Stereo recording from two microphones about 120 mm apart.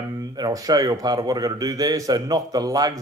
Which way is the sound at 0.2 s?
30° right (ahead or behind).